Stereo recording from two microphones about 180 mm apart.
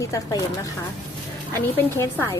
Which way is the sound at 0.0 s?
20° left (ahead or behind).